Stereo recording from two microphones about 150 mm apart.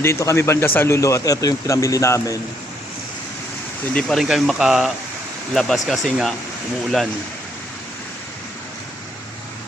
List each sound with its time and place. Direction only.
0.0 s speech: 20° left (ahead or behind)
3.9 s speech: centre (ahead or behind)